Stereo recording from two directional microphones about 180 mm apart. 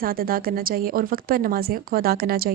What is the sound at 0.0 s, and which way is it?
A woman's voice, 55° right (ahead or behind).